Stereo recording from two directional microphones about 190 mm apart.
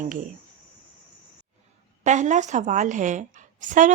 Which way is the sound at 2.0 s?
40° right (ahead or behind).